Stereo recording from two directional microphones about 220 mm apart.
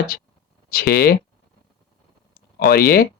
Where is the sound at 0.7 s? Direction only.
45° left (ahead or behind).